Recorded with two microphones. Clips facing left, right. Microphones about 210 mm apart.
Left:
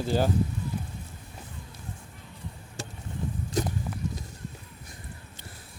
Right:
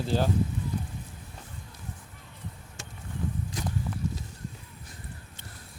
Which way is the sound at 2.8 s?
35° left (ahead or behind).